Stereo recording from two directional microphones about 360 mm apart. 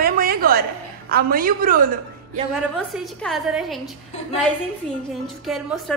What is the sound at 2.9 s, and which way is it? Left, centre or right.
Speech, centre.